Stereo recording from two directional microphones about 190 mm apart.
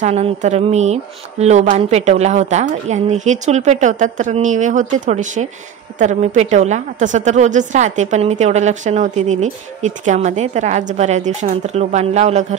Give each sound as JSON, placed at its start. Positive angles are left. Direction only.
{"t": 0.0, "sound": "a woman's voice", "side_deg": -35}